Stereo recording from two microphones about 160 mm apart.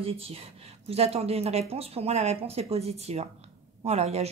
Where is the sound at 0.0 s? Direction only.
40° right (ahead or behind).